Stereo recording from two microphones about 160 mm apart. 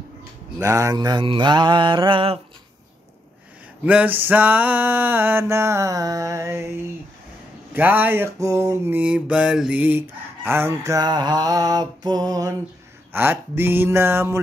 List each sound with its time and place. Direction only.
0.6 s mantra: 20° right (ahead or behind)
3.8 s mantra: 10° right (ahead or behind)
7.7 s mantra: 10° right (ahead or behind)